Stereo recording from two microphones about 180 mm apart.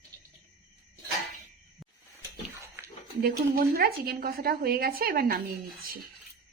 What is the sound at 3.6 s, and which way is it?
A woman's voice, 55° right (ahead or behind).